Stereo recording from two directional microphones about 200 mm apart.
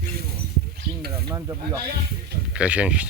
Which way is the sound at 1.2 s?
20° right (ahead or behind).